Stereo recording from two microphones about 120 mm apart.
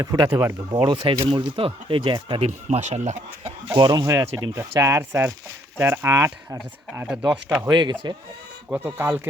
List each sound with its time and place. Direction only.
0.0 s speech: 30° right (ahead or behind)
2.6 s speech: 70° right (ahead or behind)
3.8 s speech: 35° right (ahead or behind)
4.0 s speech: 25° right (ahead or behind)
7.7 s speech: 35° right (ahead or behind)
8.7 s speech: 15° right (ahead or behind)